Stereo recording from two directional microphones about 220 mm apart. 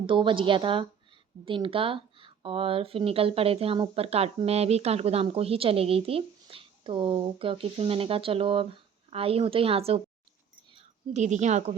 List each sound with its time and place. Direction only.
0.0 s a woman's voice: 25° right (ahead or behind)